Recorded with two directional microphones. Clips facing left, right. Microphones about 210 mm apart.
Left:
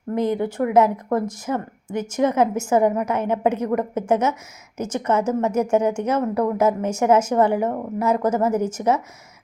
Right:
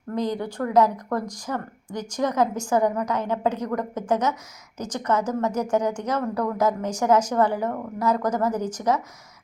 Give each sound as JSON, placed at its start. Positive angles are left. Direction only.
{"t": 0.1, "sound": "a woman's voice", "side_deg": 20}